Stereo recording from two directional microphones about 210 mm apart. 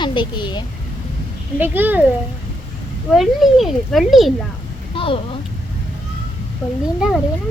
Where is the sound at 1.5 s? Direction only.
10° right (ahead or behind).